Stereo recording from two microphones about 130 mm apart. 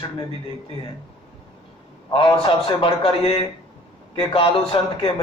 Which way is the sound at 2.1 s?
45° left (ahead or behind).